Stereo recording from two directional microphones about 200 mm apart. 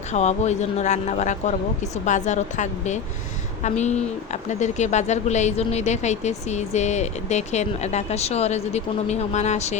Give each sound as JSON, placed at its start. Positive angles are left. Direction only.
{"t": 0.1, "sound": "speech", "side_deg": 35}